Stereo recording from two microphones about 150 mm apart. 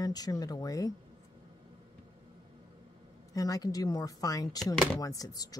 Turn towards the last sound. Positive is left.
turn(degrees=25)  # may be behind; listen again after turning